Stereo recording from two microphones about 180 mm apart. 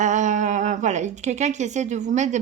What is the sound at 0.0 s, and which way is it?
Speech, 45° right (ahead or behind).